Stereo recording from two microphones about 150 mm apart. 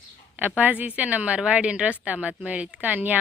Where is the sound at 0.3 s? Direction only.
10° right (ahead or behind).